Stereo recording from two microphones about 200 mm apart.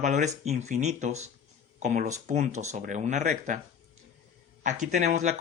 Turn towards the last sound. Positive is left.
turn(degrees=-35)  # may be behind; listen again after turning